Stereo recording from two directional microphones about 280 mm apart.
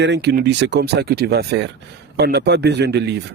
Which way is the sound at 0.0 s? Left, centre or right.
Right.